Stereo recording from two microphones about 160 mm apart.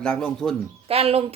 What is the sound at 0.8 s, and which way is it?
Speech, 40° right (ahead or behind).